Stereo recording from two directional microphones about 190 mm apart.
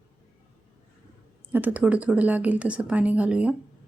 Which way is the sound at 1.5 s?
10° right (ahead or behind).